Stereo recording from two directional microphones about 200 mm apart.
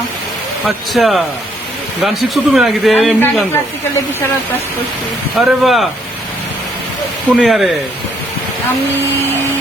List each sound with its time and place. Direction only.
0.9 s speech: centre (ahead or behind)
3.2 s speech: 10° left (ahead or behind)
5.3 s speech: centre (ahead or behind)
7.3 s speech: centre (ahead or behind)